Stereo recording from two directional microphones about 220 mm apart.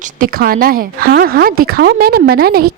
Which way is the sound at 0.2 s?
40° right (ahead or behind).